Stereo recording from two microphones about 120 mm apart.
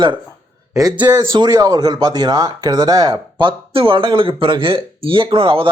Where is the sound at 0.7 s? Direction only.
30° right (ahead or behind).